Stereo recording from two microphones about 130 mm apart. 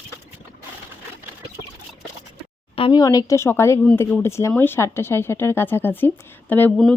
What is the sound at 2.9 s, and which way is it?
A woman's voice, 30° left (ahead or behind).